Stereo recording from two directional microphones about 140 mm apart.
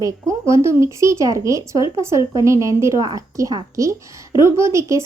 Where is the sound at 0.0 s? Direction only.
20° right (ahead or behind).